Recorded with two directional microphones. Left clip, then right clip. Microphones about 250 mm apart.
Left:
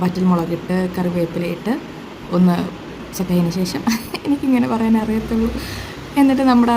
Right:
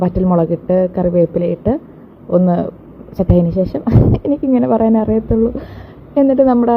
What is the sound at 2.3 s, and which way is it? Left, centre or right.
A woman's voice, centre.